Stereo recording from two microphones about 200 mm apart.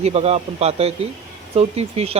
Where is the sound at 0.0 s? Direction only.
30° right (ahead or behind).